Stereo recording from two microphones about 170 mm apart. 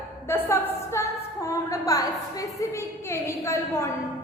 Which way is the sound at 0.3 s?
15° left (ahead or behind).